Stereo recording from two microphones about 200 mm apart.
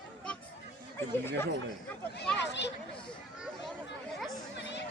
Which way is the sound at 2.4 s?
60° left (ahead or behind).